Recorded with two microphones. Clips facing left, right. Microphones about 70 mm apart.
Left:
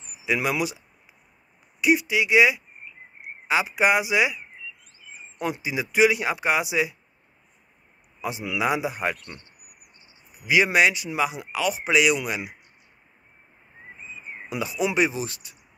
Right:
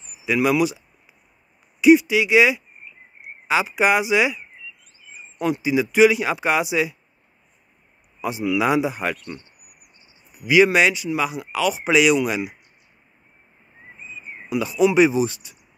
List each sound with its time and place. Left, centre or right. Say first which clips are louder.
0.3 s speech: right 6 dB; left
1.8 s speech: right 8 dB; centre
5.7 s speech: right 5 dB; centre
8.2 s speech: right 5 dB; centre
10.4 s speech: right 4 dB; centre
11.1 s speech: right 2 dB; centre
11.6 s speech: right 4 dB; centre
14.6 s speech: right 7 dB; centre
15.0 s speech: right 9 dB; centre